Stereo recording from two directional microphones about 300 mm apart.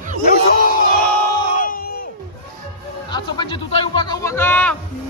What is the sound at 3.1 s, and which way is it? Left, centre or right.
Music, centre.